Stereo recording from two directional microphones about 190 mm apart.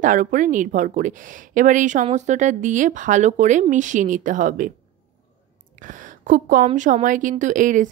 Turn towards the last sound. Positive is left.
turn(degrees=-45)  # may be behind; listen again after turning